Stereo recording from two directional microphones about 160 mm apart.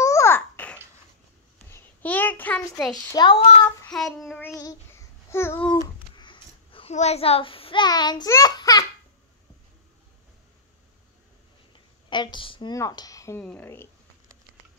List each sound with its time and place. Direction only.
0.0 s babbling: 20° left (ahead or behind)
1.7 s a sound: 10° left (ahead or behind)
3.1 s a woman's voice: 25° left (ahead or behind)
3.9 s child singing: centre (ahead or behind)
4.4 s child singing: 20° left (ahead or behind)
6.1 s a child's voice: 30° left (ahead or behind)
12.1 s a woman's voice: 30° left (ahead or behind); by 13.8 s 15° left (ahead or behind)